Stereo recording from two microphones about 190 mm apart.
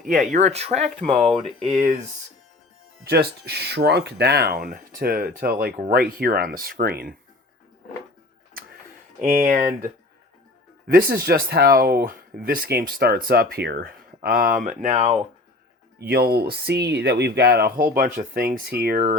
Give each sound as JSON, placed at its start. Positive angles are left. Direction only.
{"t": 0.0, "sound": "speech", "side_deg": -45}
{"t": 3.1, "sound": "speech", "side_deg": -60}
{"t": 8.6, "sound": "tick-tock", "side_deg": -50}
{"t": 9.2, "sound": "speech", "side_deg": -45}
{"t": 16.0, "sound": "speech", "side_deg": -55}
{"t": 17.9, "sound": "speech", "side_deg": -45}